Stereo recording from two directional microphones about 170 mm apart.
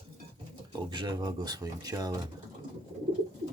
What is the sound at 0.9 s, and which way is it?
Speech, 25° right (ahead or behind).